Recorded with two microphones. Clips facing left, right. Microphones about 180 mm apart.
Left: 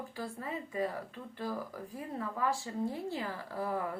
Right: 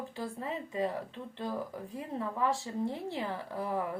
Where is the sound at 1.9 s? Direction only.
25° right (ahead or behind).